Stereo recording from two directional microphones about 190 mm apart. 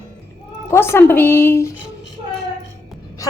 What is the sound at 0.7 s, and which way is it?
A woman's voice, 15° left (ahead or behind).